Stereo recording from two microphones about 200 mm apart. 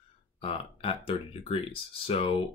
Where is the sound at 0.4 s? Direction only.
30° left (ahead or behind).